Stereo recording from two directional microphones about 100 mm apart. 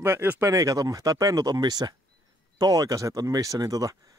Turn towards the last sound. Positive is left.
turn(degrees=-40)  # may be behind; listen again after turning